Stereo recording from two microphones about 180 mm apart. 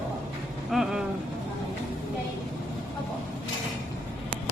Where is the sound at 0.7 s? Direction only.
5° right (ahead or behind).